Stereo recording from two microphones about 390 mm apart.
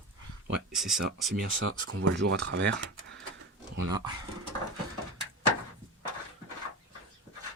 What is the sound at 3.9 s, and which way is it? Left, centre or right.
Speech, centre.